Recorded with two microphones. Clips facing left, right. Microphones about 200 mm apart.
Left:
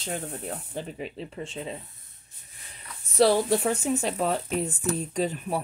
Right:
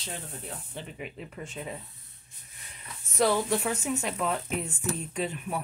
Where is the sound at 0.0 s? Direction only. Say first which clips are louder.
Left 7 dB; 45° left (ahead or behind); by 1.8 s 25° left (ahead or behind).